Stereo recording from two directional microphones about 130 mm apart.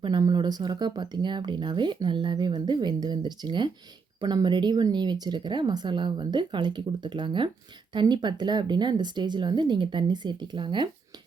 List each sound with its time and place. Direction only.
0.0 s speech: 35° right (ahead or behind)